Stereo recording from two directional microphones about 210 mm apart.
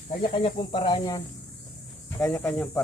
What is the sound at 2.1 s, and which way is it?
Speech, 10° left (ahead or behind).